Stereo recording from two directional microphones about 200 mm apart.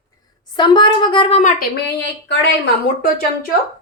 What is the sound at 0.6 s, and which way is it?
Speech, 25° left (ahead or behind).